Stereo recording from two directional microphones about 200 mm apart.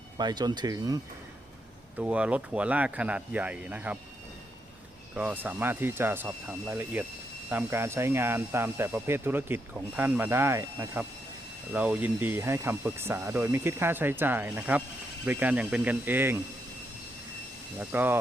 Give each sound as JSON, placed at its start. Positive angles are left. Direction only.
{"t": 0.2, "sound": "speech", "side_deg": -20}
{"t": 2.0, "sound": "speech", "side_deg": -5}
{"t": 5.1, "sound": "speech", "side_deg": -10}
{"t": 17.7, "sound": "speech", "side_deg": -10}